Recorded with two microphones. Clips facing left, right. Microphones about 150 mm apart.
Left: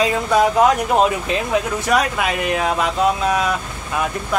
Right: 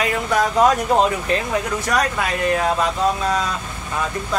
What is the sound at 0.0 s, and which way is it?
Speech, 20° left (ahead or behind).